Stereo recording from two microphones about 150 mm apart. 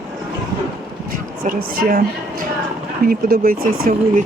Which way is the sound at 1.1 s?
70° right (ahead or behind).